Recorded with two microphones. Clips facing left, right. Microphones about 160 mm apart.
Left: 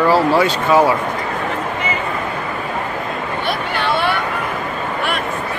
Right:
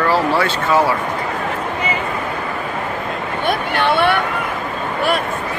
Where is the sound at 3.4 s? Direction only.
60° right (ahead or behind).